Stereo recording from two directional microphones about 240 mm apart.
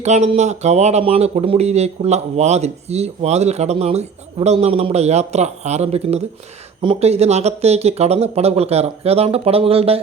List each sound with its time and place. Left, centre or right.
0.0 s speech: right